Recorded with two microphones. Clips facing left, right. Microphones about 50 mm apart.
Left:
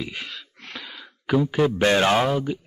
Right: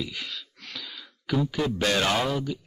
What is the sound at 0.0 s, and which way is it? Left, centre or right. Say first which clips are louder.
Speech: left 2 dB; left.